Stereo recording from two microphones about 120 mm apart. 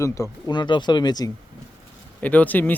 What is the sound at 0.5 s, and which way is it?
Speech, 40° left (ahead or behind).